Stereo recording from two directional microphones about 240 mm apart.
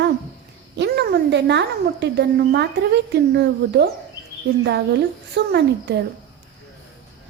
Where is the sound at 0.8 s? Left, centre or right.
Right.